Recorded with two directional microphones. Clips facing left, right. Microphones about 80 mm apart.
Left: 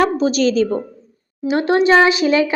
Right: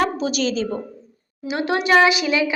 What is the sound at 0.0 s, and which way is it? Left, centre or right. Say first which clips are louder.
A woman's voice: left 6 dB; left.